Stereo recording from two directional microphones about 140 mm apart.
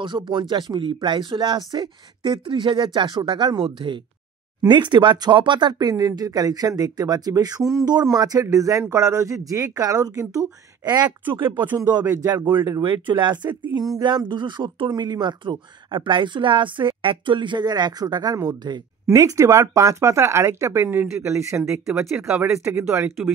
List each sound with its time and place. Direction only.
0.0 s speech: 35° right (ahead or behind)
11.3 s speech: 35° right (ahead or behind); by 21.8 s 20° right (ahead or behind)
21.8 s speech: 5° right (ahead or behind)
22.4 s speech: 15° right (ahead or behind)